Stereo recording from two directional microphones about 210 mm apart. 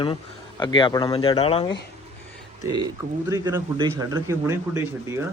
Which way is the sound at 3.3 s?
15° right (ahead or behind).